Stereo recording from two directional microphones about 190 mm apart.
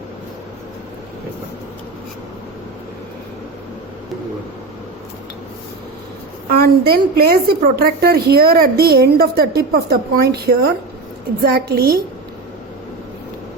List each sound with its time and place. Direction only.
6.6 s a woman's voice: 55° right (ahead or behind)